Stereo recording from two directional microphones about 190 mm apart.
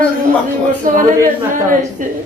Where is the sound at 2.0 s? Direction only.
45° right (ahead or behind).